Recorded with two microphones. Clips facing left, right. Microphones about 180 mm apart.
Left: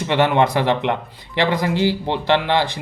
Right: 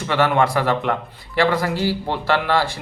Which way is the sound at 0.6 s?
45° right (ahead or behind).